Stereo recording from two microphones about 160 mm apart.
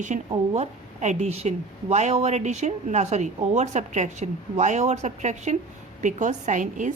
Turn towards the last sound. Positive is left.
turn(degrees=-50)  # may be behind; listen again after turning